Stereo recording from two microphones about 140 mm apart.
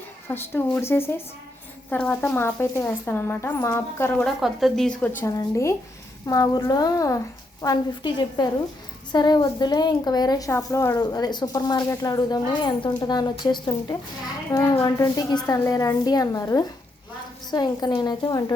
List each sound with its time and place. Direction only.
0.3 s speech: 15° left (ahead or behind)
4.2 s a woman's voice: centre (ahead or behind); by 18.5 s 30° left (ahead or behind)